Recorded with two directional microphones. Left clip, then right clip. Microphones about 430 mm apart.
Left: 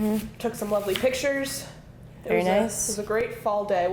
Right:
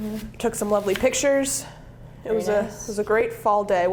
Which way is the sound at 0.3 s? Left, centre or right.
Right.